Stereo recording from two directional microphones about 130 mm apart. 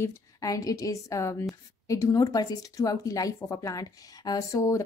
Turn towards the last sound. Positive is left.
turn(degrees=25)  # may be behind; listen again after turning